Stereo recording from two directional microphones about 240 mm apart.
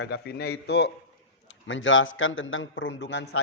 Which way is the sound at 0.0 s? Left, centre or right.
Left.